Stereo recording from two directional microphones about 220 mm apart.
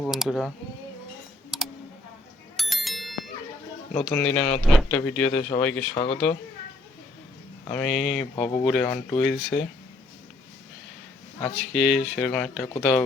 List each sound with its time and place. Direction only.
0.0 s speech: centre (ahead or behind)
2.6 s bicycle bell: centre (ahead or behind)
3.9 s speech: 5° left (ahead or behind)
5.9 s speech: 25° left (ahead or behind)
7.7 s speech: centre (ahead or behind)
11.3 s speech: 5° left (ahead or behind)